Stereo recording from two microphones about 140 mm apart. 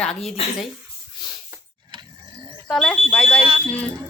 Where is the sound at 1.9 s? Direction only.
30° right (ahead or behind).